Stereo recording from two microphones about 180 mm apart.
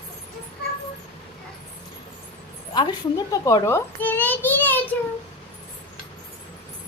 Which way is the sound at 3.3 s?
20° left (ahead or behind).